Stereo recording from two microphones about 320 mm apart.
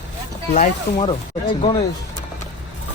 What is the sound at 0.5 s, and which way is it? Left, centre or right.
Speech, centre.